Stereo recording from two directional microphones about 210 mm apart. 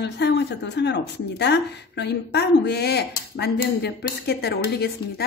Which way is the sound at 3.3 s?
50° left (ahead or behind).